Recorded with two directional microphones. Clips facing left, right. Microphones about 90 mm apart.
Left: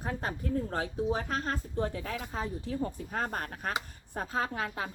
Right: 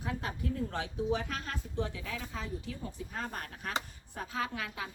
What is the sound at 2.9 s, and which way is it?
A woman's voice, 50° left (ahead or behind).